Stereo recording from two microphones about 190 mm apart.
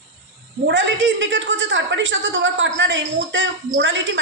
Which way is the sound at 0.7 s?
70° right (ahead or behind).